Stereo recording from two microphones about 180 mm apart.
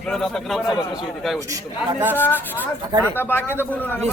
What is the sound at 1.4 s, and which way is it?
Speech, 15° right (ahead or behind).